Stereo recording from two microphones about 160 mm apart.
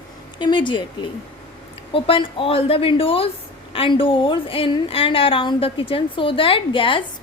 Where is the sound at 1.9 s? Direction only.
35° left (ahead or behind).